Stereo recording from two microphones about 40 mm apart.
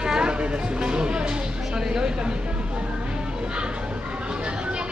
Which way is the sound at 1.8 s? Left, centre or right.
Centre.